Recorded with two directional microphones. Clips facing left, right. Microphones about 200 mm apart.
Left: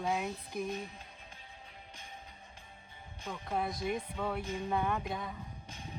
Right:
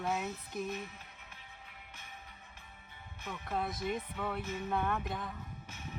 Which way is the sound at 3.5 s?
Centre (ahead or behind).